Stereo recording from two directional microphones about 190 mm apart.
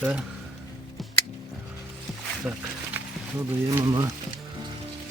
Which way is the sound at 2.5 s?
5° right (ahead or behind).